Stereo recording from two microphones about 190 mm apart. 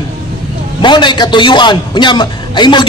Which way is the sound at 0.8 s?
25° left (ahead or behind).